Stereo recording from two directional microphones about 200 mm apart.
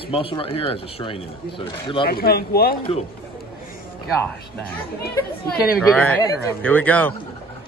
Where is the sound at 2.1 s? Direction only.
50° left (ahead or behind).